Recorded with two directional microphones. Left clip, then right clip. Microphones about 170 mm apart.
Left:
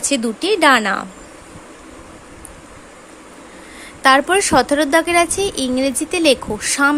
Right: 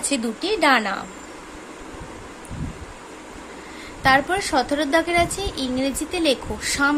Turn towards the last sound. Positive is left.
turn(degrees=30)  # may be behind; listen again after turning